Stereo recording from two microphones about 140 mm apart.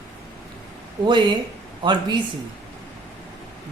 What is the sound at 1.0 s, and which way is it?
Speech, 35° right (ahead or behind).